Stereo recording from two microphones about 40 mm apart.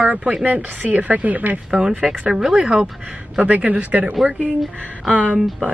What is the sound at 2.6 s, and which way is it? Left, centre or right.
Speech, right.